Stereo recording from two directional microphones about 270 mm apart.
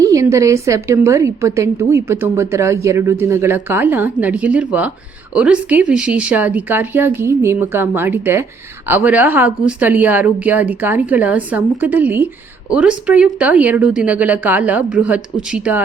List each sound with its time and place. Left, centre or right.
0.0 s a woman's voice: centre